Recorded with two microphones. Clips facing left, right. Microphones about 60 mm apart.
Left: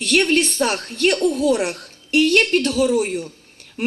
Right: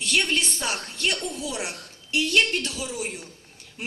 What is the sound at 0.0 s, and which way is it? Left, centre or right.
Speech, left.